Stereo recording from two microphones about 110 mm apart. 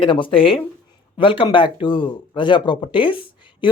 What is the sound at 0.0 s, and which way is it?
Speech, 50° left (ahead or behind).